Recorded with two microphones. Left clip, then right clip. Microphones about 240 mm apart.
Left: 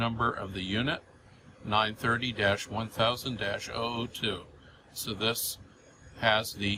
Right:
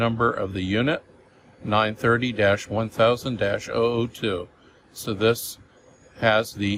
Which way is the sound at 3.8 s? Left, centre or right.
Right.